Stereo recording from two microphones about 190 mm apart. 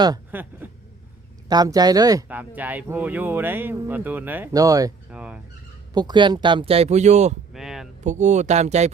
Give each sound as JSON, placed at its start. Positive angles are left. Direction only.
{"t": 0.3, "sound": "speech", "side_deg": -10}
{"t": 1.5, "sound": "speech", "side_deg": -20}
{"t": 2.2, "sound": "speech", "side_deg": -10}
{"t": 5.1, "sound": "speech", "side_deg": -5}
{"t": 5.9, "sound": "speech", "side_deg": -20}
{"t": 7.5, "sound": "a sound", "side_deg": 0}
{"t": 8.0, "sound": "speech", "side_deg": -40}